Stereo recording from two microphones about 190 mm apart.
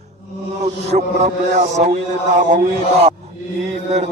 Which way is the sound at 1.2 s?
35° right (ahead or behind).